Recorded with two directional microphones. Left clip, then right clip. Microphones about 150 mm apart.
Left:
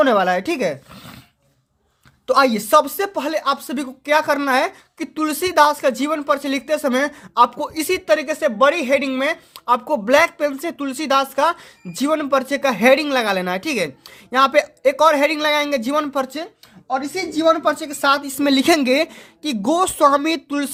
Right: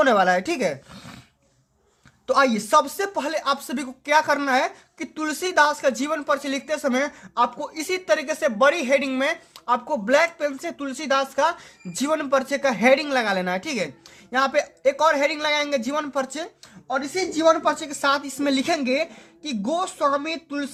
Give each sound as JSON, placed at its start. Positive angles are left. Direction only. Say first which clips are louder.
{"t": 0.0, "sound": "speech", "louder": "left 2 dB", "side_deg": 30}
{"t": 2.2, "sound": "speech", "louder": "left 4 dB", "side_deg": 40}
{"t": 9.6, "sound": "speech", "louder": "left 5 dB", "side_deg": 50}
{"t": 11.9, "sound": "speech", "louder": "left 3 dB", "side_deg": 30}
{"t": 16.9, "sound": "a woman's voice", "louder": "left 3 dB", "side_deg": 15}
{"t": 17.6, "sound": "a woman's voice", "louder": "left 4 dB", "side_deg": 30}